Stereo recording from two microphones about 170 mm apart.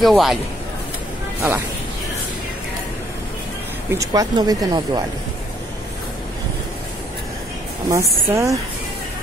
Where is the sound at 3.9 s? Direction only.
20° right (ahead or behind).